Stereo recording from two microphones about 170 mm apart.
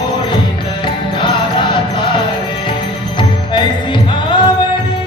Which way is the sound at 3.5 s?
30° left (ahead or behind).